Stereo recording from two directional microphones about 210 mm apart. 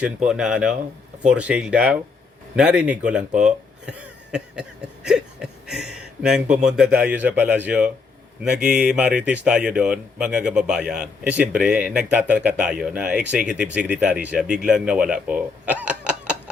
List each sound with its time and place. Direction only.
0.3 s speech: 5° right (ahead or behind)